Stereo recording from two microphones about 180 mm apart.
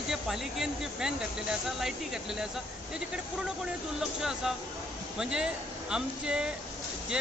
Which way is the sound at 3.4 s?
5° right (ahead or behind).